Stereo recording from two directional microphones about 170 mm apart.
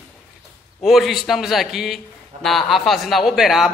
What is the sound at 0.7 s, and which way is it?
A man's voice, centre (ahead or behind).